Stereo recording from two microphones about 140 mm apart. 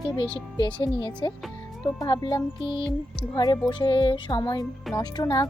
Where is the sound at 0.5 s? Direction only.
30° left (ahead or behind).